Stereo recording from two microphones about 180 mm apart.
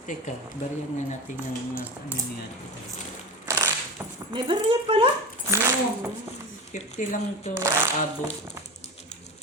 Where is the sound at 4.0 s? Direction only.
15° right (ahead or behind).